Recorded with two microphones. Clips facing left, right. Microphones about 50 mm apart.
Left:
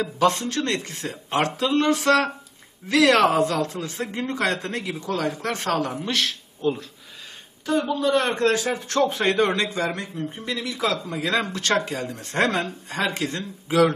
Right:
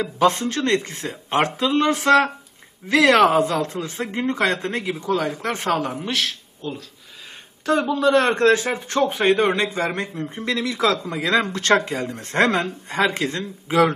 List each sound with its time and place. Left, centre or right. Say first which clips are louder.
0.2 s speech: right 3 dB; right; by 6.3 s centre
6.6 s speech: left 7 dB; centre
7.6 s speech: right 3 dB; right
7.9 s a man's voice: right 4 dB; right
8.5 s speech: right 2 dB; right
9.0 s speech: right 2 dB; centre
9.6 s speech: right 2 dB; right
10.3 s speech: right 5 dB; right
10.9 s speech: right 4 dB; right